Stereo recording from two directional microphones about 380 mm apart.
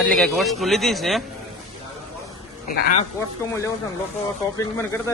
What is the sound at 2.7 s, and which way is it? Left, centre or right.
Speech, left.